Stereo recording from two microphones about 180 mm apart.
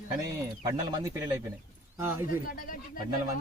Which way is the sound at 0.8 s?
20° right (ahead or behind).